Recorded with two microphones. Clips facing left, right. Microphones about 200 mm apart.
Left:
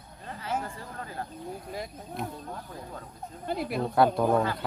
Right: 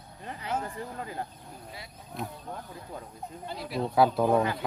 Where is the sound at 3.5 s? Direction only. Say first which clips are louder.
Left 4 dB; 55° left (ahead or behind).